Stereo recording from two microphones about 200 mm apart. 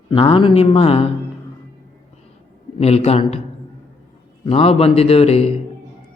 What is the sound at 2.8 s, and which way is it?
Speech, 30° left (ahead or behind).